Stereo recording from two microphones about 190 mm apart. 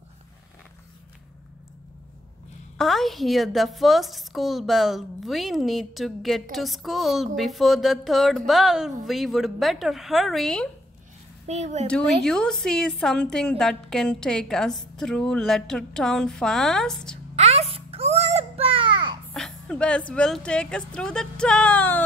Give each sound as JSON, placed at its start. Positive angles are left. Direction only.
{"t": 2.8, "sound": "a woman's voice", "side_deg": 0}
{"t": 11.4, "sound": "speech", "side_deg": -35}
{"t": 11.9, "sound": "a woman's voice", "side_deg": 5}
{"t": 17.4, "sound": "a sound", "side_deg": -35}
{"t": 19.3, "sound": "a sound", "side_deg": 5}
{"t": 20.1, "sound": "a woman's voice", "side_deg": 5}